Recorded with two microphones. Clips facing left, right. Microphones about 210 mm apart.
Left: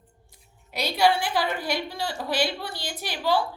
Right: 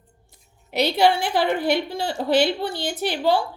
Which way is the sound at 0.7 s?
60° right (ahead or behind).